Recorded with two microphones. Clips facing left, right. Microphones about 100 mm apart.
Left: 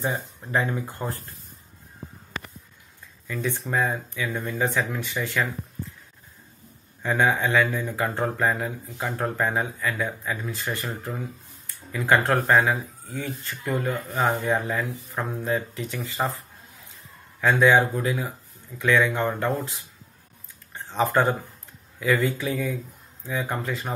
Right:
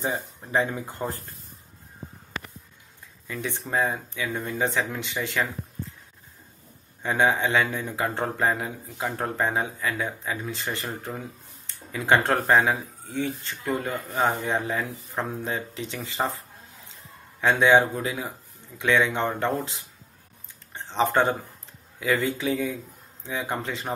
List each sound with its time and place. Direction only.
0.0 s speech: 20° right (ahead or behind)
3.3 s speech: 15° right (ahead or behind)
7.0 s speech: 20° right (ahead or behind)
11.6 s a sound: 25° right (ahead or behind)
12.7 s speech: 30° left (ahead or behind)
13.2 s speech: 25° right (ahead or behind)
17.4 s speech: 20° right (ahead or behind)